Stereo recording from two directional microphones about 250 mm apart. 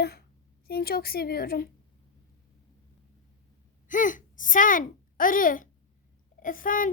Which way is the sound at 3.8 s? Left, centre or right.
Left.